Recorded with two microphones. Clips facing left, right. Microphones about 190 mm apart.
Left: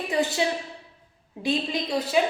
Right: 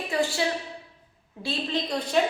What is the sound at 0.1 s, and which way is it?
A woman's voice, 20° left (ahead or behind).